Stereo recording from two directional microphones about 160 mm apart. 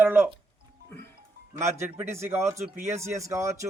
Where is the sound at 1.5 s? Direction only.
15° right (ahead or behind).